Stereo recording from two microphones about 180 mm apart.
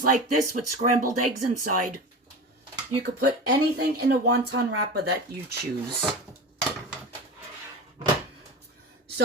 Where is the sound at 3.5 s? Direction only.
65° right (ahead or behind).